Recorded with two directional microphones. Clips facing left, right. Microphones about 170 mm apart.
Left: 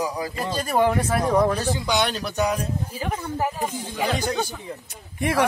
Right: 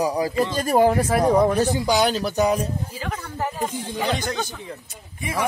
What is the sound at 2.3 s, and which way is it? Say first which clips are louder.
Speech: right 3 dB; 35° right (ahead or behind).